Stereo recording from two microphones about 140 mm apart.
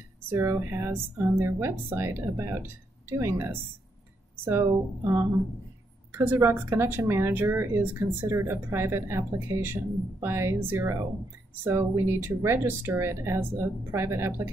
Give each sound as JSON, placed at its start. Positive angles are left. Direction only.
{"t": 0.3, "sound": "speech", "side_deg": -20}